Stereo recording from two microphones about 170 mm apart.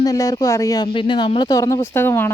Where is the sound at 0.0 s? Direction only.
20° left (ahead or behind).